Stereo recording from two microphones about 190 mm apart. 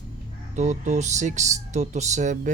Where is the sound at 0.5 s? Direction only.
40° right (ahead or behind).